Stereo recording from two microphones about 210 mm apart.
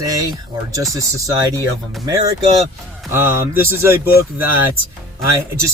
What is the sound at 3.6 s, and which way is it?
Speech, 10° right (ahead or behind).